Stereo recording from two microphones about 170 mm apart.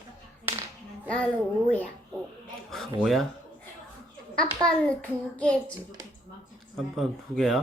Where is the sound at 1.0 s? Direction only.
5° left (ahead or behind).